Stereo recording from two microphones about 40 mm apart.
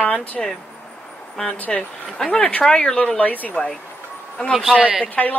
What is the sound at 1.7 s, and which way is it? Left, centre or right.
Speech, left.